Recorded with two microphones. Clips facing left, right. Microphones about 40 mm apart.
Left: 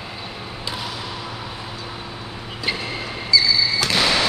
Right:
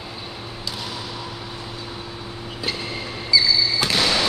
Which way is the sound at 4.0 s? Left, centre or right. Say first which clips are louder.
Left 2 dB; centre.